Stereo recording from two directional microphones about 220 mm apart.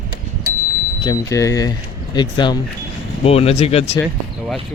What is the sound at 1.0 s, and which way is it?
Speech, 15° left (ahead or behind).